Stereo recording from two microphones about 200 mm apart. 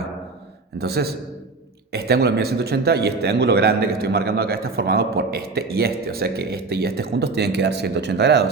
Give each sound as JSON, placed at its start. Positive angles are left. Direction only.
{"t": 0.8, "sound": "a man's voice", "side_deg": -55}